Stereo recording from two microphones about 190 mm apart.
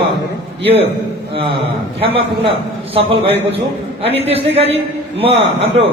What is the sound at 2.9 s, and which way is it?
A man's voice, 30° right (ahead or behind).